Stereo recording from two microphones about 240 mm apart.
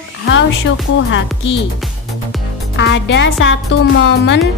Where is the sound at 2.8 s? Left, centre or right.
Left.